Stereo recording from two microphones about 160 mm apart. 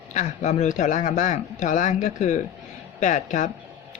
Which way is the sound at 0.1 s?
50° left (ahead or behind).